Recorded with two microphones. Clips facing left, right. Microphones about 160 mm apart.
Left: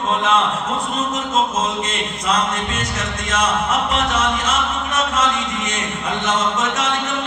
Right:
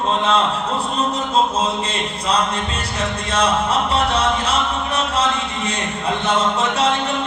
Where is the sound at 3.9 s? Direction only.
30° right (ahead or behind).